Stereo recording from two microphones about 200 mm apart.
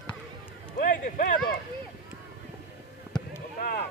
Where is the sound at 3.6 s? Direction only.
45° left (ahead or behind).